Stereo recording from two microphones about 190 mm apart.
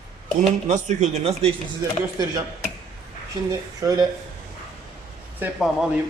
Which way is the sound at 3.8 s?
20° right (ahead or behind).